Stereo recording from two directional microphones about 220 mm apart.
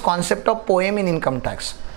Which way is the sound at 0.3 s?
15° right (ahead or behind).